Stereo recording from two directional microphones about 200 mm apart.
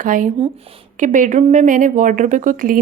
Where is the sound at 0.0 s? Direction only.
40° right (ahead or behind).